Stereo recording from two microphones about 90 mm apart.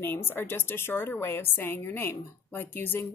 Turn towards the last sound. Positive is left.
turn(degrees=25)  # may be behind; listen again after turning